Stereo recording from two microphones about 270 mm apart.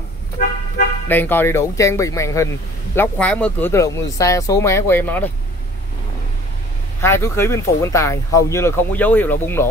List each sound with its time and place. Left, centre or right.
1.0 s speech: centre
7.0 s speech: centre